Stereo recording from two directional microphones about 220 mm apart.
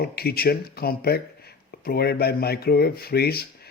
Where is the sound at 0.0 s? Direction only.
45° left (ahead or behind).